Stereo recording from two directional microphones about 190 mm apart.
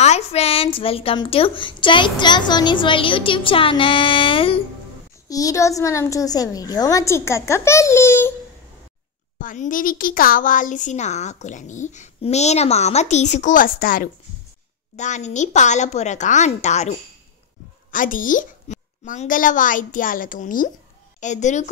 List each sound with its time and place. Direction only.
0.0 s a woman's voice: 35° left (ahead or behind)
5.3 s a woman's voice: 15° left (ahead or behind)
9.4 s a child's voice: 45° left (ahead or behind)
17.9 s a child's voice: 45° left (ahead or behind)